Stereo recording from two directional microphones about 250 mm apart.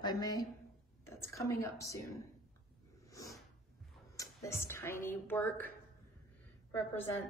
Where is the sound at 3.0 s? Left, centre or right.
Centre.